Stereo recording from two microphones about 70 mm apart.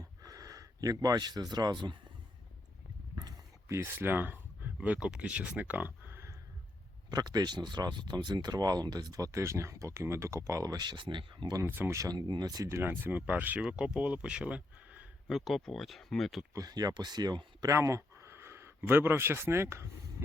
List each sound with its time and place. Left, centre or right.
0.2 s speech: right
3.7 s speech: right
7.1 s speech: right
9.3 s speech: right
10.6 s speech: right
11.6 s speech: right
12.1 s speech: right
12.6 s speech: right
13.6 s speech: centre
15.3 s speech: centre
16.6 s speech: right
17.7 s speech: right